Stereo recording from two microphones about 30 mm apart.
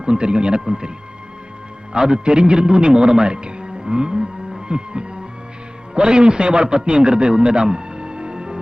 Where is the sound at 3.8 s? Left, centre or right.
Right.